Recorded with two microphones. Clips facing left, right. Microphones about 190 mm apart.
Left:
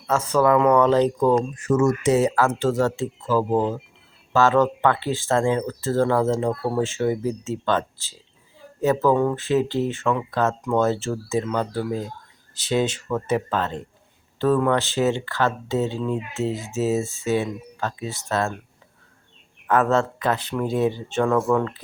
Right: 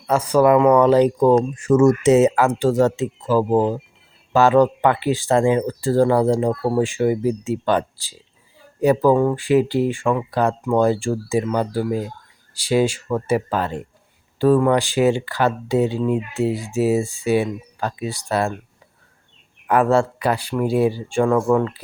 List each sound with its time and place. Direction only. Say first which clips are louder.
0.1 s speech: right 4 dB; 15° right (ahead or behind)
1.5 s speech: right 5 dB; 30° right (ahead or behind); by 18.5 s 15° right (ahead or behind)
19.6 s speech: right 3 dB; 10° right (ahead or behind)